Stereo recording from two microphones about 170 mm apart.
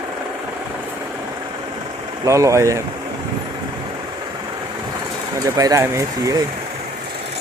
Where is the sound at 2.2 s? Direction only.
20° right (ahead or behind).